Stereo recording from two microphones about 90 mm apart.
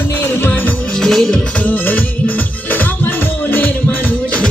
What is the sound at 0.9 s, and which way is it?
Music, 5° left (ahead or behind).